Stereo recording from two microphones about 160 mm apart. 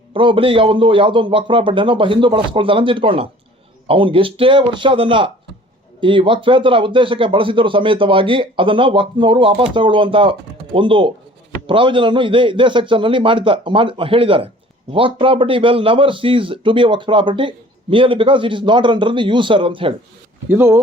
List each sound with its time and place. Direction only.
0.1 s speech: 30° right (ahead or behind)
20.5 s speech: 15° right (ahead or behind)